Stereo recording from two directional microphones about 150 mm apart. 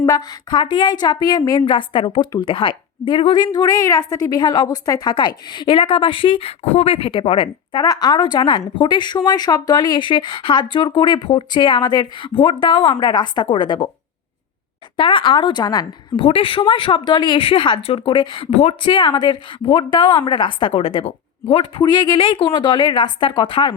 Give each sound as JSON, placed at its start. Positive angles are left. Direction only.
{"t": 0.0, "sound": "a woman's voice", "side_deg": 30}
{"t": 14.9, "sound": "a woman's voice", "side_deg": 35}
{"t": 16.2, "sound": "a woman's voice", "side_deg": 35}